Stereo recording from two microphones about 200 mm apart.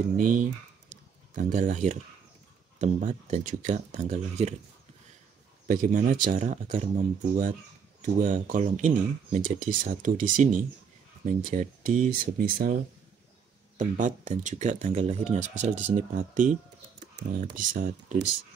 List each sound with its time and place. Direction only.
0.2 s speech: 40° right (ahead or behind)
5.7 s speech: 40° right (ahead or behind)
8.0 s speech: 40° right (ahead or behind)
13.7 s speech: 35° right (ahead or behind)